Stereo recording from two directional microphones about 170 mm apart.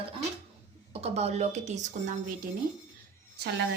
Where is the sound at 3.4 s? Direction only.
75° right (ahead or behind).